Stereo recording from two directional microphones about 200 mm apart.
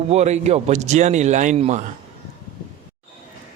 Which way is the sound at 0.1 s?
35° right (ahead or behind).